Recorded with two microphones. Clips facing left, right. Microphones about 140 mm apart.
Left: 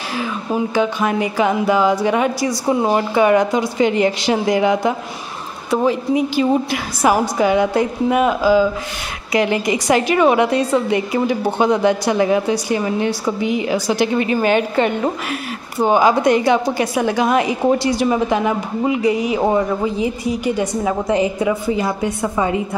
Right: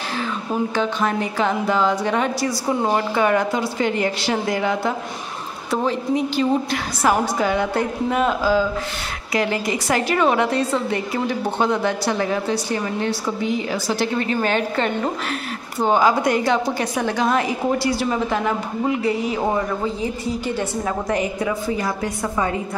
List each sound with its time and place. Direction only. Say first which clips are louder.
0.7 s a woman's voice: left 5 dB; 10° left (ahead or behind)
21.1 s a woman's voice: left 6 dB; 25° left (ahead or behind)